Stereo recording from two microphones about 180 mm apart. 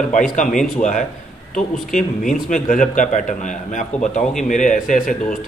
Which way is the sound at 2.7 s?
45° left (ahead or behind).